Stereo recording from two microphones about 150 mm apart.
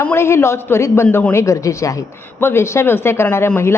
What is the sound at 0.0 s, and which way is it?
A woman's voice, 15° left (ahead or behind).